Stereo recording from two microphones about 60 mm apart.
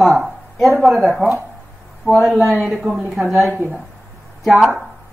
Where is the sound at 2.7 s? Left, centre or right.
Centre.